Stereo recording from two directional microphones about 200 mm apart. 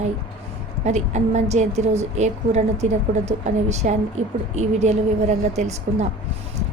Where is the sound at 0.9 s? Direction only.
35° right (ahead or behind).